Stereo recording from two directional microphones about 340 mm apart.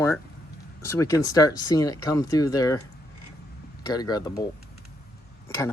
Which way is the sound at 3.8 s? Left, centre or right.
Centre.